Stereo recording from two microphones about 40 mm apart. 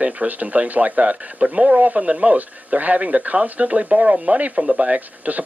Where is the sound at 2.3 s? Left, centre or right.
Right.